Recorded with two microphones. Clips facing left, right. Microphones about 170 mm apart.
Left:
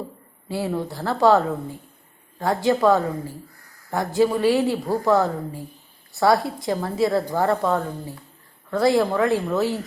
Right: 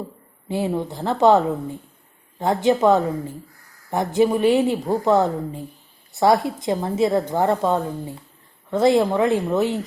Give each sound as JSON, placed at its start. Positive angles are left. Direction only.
{"t": 0.4, "sound": "a woman's voice", "side_deg": -20}